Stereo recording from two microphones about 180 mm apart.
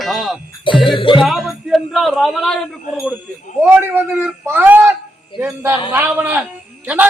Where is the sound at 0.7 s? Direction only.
25° left (ahead or behind).